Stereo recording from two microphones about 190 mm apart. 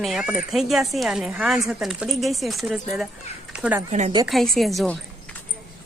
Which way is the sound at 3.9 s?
35° right (ahead or behind).